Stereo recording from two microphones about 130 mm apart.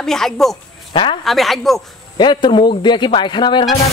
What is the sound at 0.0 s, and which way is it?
Speech, 5° left (ahead or behind).